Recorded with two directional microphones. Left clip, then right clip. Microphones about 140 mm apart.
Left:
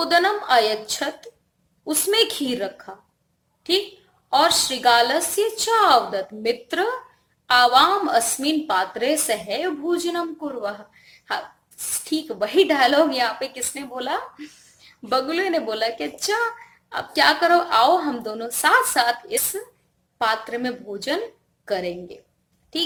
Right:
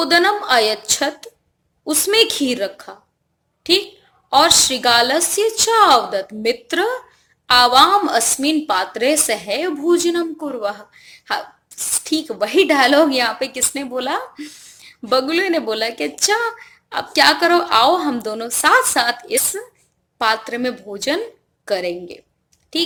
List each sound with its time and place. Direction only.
0.0 s a woman's voice: 35° right (ahead or behind)